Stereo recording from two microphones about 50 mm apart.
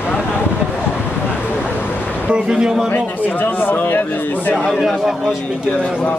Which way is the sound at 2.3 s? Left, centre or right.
Centre.